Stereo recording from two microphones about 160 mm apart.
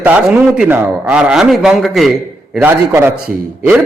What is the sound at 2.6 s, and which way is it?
Speech, 15° right (ahead or behind).